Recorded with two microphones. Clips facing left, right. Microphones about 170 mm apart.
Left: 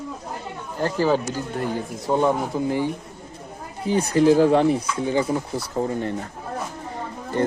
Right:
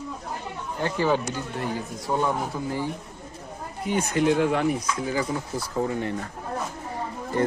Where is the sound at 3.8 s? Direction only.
35° left (ahead or behind).